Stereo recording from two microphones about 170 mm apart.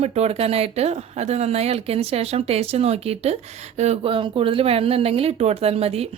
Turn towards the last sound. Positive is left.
turn(degrees=-35)  # may be behind; listen again after turning